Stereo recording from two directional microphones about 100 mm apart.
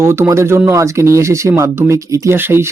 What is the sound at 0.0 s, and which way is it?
Speech, 25° right (ahead or behind).